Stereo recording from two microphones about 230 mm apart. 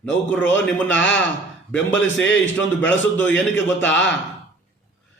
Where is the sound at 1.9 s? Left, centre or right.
Left.